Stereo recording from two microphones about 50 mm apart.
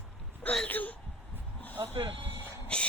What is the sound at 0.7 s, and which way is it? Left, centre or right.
Speech, left.